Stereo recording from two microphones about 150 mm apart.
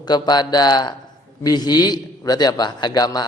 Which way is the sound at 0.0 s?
30° left (ahead or behind).